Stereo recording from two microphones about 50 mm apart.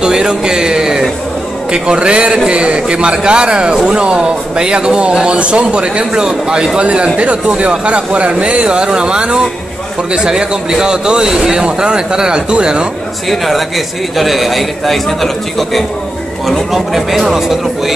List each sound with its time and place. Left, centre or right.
0.0 s a sound: centre
1.7 s speech: centre
13.3 s a man's voice: centre